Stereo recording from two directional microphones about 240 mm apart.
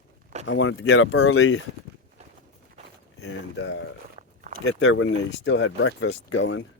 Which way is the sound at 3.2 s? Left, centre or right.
Left.